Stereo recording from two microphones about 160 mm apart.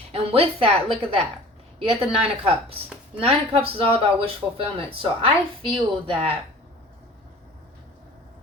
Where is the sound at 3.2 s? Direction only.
35° right (ahead or behind).